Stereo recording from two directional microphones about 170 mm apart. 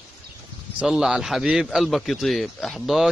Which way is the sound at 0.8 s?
5° right (ahead or behind).